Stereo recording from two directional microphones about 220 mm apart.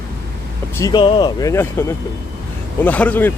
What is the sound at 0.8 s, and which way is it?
Speech, 20° left (ahead or behind).